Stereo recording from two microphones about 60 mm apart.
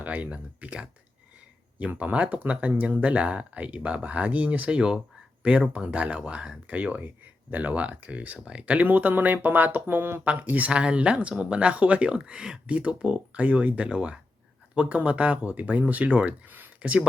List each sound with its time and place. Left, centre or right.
0.0 s speech: right
10.2 s speech: right
16.5 s a sound: right